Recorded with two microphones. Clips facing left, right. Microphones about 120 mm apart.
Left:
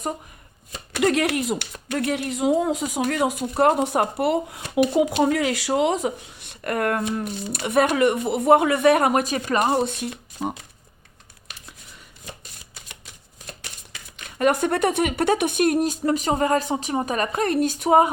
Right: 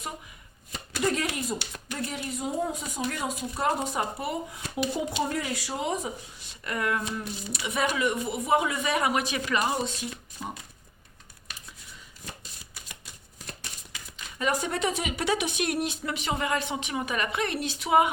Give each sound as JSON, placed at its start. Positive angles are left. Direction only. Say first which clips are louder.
{"t": 0.9, "sound": "speech", "louder": "left 7 dB", "side_deg": 70}
{"t": 3.0, "sound": "speech", "louder": "left 7 dB", "side_deg": 70}
{"t": 14.3, "sound": "speech", "louder": "left 8 dB", "side_deg": 60}